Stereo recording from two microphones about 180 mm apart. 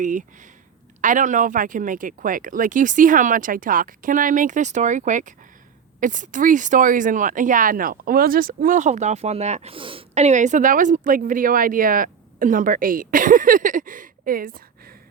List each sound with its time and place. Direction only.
0.0 s speech: 45° right (ahead or behind)